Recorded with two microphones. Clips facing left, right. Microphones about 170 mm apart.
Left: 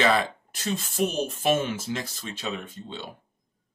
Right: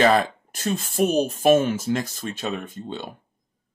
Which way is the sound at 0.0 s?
45° right (ahead or behind).